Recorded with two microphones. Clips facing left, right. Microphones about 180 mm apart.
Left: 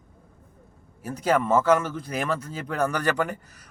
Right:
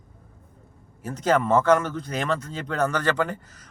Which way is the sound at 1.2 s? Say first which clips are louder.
Right 1 dB; 5° left (ahead or behind).